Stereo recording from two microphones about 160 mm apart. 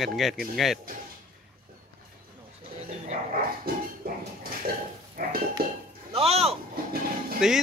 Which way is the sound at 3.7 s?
70° right (ahead or behind).